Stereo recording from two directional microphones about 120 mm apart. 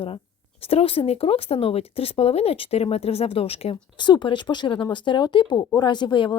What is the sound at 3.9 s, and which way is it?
Speech, 40° left (ahead or behind).